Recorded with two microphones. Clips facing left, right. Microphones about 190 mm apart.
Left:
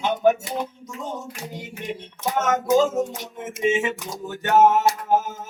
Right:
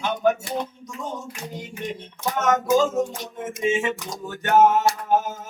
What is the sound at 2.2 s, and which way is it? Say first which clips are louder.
Music: right 1 dB; 25° left (ahead or behind).